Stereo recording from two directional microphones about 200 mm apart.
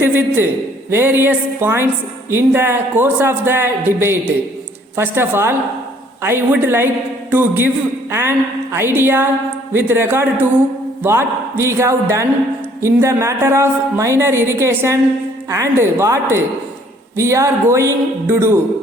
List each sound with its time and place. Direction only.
0.0 s a woman's voice: 10° right (ahead or behind)